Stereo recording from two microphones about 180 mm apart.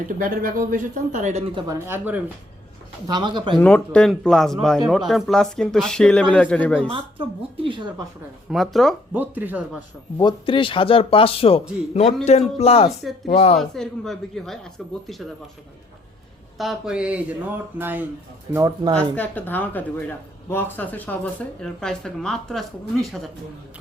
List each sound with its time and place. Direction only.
0.2 s speech: 50° right (ahead or behind)
1.6 s speech: 10° right (ahead or behind)
3.1 s speech: 25° right (ahead or behind)
3.6 s speech: 5° left (ahead or behind)
6.9 s speech: 30° right (ahead or behind)
8.4 s speech: centre (ahead or behind)
9.1 s speech: 10° right (ahead or behind)
10.2 s a man's voice: 25° left (ahead or behind)
13.6 s speech: centre (ahead or behind)
16.6 s speech: centre (ahead or behind); by 18.9 s 20° right (ahead or behind)
18.9 s speech: 10° left (ahead or behind)